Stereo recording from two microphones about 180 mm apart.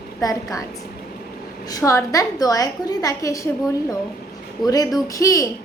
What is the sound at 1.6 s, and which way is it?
A woman's voice, 20° left (ahead or behind).